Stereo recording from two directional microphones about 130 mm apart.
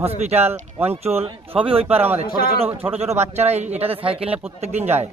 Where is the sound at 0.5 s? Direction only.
15° right (ahead or behind).